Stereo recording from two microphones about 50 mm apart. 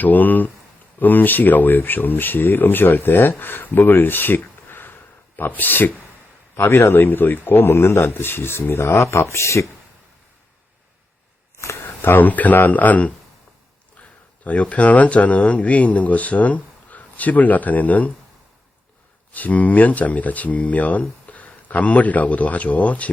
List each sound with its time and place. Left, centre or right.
0.0 s speech: left
6.6 s speech: left
9.0 s speech: left
11.5 s a sound: left
12.0 s speech: left
14.4 s speech: left
19.3 s speech: left